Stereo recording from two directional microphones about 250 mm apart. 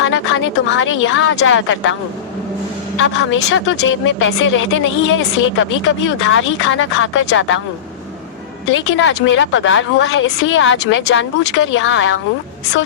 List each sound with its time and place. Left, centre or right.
0.0 s speech: left
3.2 s speech: left
8.7 s speech: left